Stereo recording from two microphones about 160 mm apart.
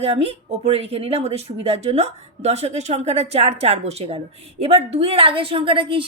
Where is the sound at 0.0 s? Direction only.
40° right (ahead or behind).